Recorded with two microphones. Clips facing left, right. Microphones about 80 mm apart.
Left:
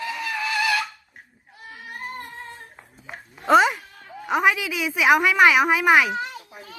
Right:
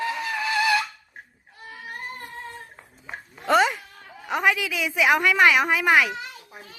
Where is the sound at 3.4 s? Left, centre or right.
Centre.